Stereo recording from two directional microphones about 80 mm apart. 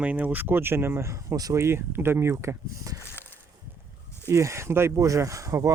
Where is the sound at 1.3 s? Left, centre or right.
Right.